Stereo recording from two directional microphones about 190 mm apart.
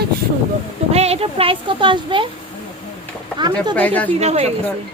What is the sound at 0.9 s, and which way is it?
Speech, 35° right (ahead or behind).